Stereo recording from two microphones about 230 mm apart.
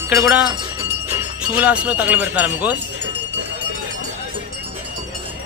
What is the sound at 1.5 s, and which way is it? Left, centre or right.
Speech, centre.